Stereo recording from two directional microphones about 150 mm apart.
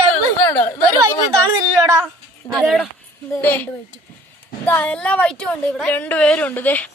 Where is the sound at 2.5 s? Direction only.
Centre (ahead or behind).